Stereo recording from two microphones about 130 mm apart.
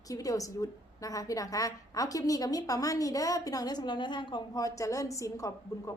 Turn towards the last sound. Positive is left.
turn(degrees=25)  # may be behind; listen again after turning